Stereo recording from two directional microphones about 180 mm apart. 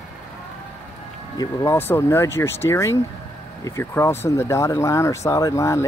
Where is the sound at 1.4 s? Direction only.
15° left (ahead or behind).